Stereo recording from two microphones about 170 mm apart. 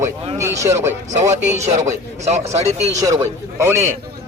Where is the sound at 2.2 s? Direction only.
40° right (ahead or behind).